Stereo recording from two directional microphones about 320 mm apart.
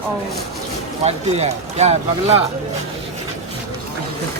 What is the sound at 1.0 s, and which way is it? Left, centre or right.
Speech, centre.